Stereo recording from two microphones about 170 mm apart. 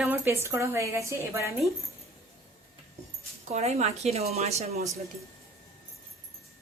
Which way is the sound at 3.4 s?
40° right (ahead or behind).